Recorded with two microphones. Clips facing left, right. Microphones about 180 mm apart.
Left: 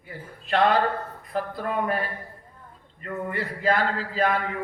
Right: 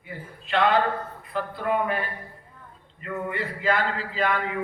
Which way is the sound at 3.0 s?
40° left (ahead or behind).